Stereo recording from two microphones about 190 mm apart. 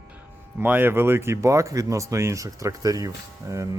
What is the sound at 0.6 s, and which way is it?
Speech, 10° right (ahead or behind).